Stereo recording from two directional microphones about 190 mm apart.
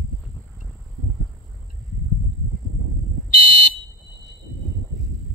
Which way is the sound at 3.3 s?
45° left (ahead or behind).